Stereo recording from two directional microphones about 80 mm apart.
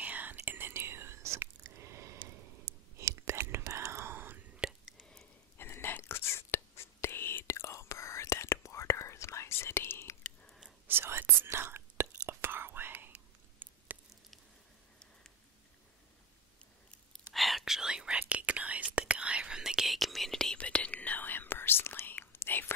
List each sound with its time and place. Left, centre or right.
0.0 s whispering: right
4.6 s whispering: centre
5.6 s whispering: left
10.4 s whispering: centre
10.9 s whispering: right
17.3 s whispering: centre
20.5 s whispering: centre